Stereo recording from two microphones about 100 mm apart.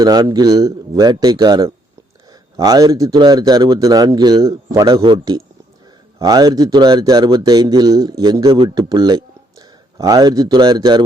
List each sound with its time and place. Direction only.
0.0 s speech: 40° right (ahead or behind)
6.1 s speech: 40° right (ahead or behind)
8.4 s a man's voice: 60° right (ahead or behind)
8.7 s speech: 45° right (ahead or behind)